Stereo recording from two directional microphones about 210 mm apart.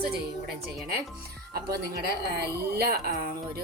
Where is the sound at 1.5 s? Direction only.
50° right (ahead or behind).